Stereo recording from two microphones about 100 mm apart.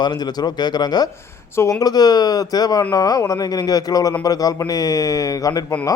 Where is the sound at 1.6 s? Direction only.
35° left (ahead or behind).